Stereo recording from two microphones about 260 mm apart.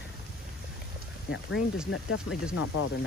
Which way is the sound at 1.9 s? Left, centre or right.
Left.